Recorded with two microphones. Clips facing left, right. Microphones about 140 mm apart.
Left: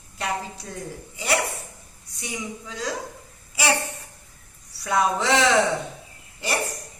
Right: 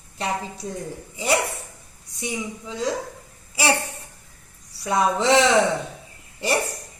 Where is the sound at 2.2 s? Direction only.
25° right (ahead or behind).